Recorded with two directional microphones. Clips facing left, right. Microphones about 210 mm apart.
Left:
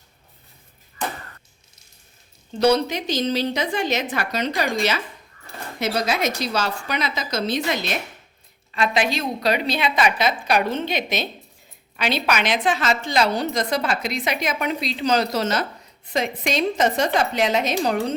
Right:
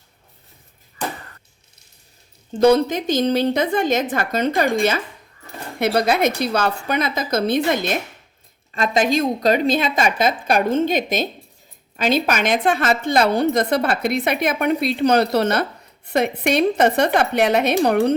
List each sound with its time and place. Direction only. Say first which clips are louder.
2.5 s a woman's voice: right 4 dB; 50° right (ahead or behind)